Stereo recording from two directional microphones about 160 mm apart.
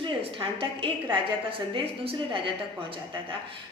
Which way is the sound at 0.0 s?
35° right (ahead or behind).